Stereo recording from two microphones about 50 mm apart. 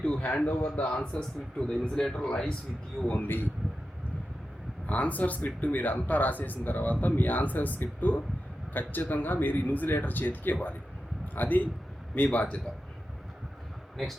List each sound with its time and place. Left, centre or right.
0.0 s a man's voice: left
3.1 s speech: left
4.9 s speech: left
13.9 s speech: centre